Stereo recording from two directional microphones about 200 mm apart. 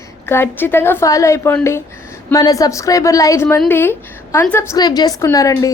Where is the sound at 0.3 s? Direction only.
10° left (ahead or behind).